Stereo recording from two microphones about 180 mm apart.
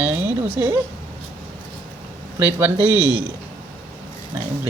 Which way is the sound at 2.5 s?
10° right (ahead or behind).